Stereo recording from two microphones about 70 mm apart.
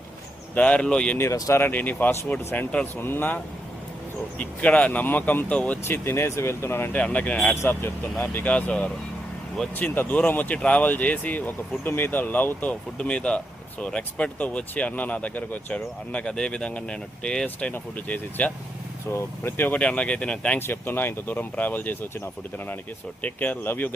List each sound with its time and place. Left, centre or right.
0.5 s speech: centre
1.5 s speech: left
5.8 s speech: left
6.9 s speech: left
7.5 s speech: left
8.2 s speech: left
20.6 s speech: left